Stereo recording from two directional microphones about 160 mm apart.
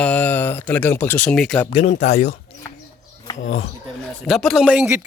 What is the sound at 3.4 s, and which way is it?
Speech, 55° left (ahead or behind).